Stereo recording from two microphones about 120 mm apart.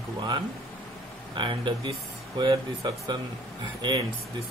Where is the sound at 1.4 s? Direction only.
45° right (ahead or behind).